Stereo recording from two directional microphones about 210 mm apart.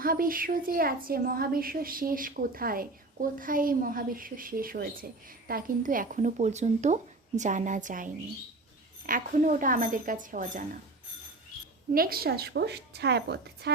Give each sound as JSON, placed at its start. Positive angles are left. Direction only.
{"t": 0.0, "sound": "speech", "side_deg": -45}
{"t": 11.9, "sound": "speech", "side_deg": -45}